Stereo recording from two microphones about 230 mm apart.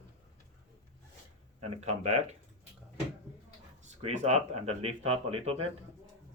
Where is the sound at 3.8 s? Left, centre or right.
Right.